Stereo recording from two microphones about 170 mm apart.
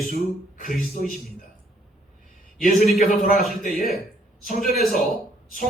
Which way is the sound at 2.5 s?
55° left (ahead or behind).